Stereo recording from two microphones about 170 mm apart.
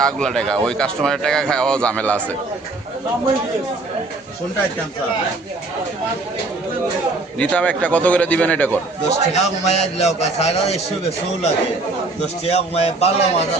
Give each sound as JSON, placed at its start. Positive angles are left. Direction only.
{"t": 0.0, "sound": "speech", "side_deg": 5}
{"t": 7.3, "sound": "a man's voice", "side_deg": 10}
{"t": 9.0, "sound": "a man's voice", "side_deg": 40}
{"t": 12.2, "sound": "a man's voice", "side_deg": 40}